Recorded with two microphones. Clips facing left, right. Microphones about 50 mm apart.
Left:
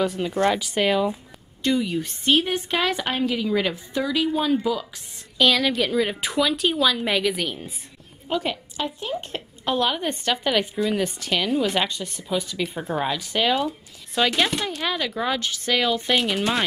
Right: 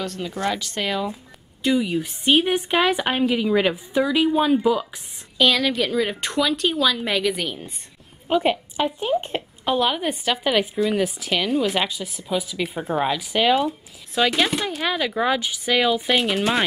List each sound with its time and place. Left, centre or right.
0.0 s speech: centre
1.6 s a woman's voice: centre
5.4 s a woman's voice: centre
8.3 s a woman's voice: right
9.7 s a woman's voice: centre